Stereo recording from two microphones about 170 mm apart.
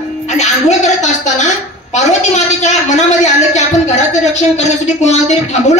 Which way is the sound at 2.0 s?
45° left (ahead or behind).